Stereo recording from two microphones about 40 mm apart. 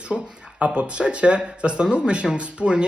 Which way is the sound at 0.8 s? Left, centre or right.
Right.